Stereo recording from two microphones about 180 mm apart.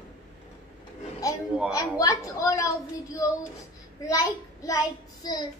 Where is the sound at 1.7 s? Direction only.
20° left (ahead or behind).